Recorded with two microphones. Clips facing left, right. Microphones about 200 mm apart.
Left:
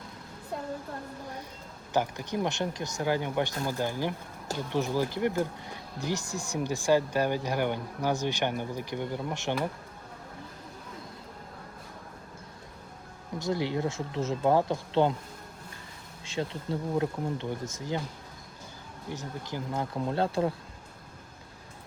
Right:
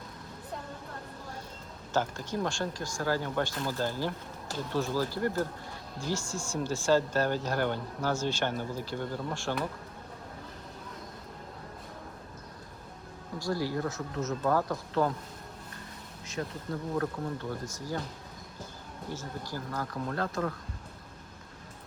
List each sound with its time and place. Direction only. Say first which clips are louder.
1.9 s speech: left 2 dB; 15° left (ahead or behind)
13.4 s speech: left 2 dB; 20° left (ahead or behind)
16.2 s speech: left 3 dB; 30° left (ahead or behind)
19.1 s speech: left 2 dB; 20° left (ahead or behind)